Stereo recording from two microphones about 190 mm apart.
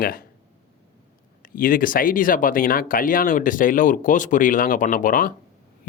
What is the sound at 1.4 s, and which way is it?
Speech, 45° left (ahead or behind).